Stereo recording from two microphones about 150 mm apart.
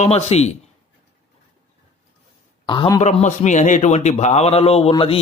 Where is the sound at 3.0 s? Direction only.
50° left (ahead or behind).